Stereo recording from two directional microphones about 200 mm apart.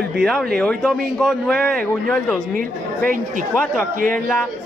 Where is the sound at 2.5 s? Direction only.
45° right (ahead or behind).